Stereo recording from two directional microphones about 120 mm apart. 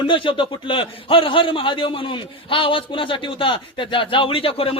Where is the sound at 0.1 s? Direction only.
45° left (ahead or behind).